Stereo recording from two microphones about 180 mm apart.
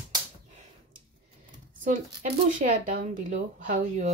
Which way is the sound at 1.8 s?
50° right (ahead or behind).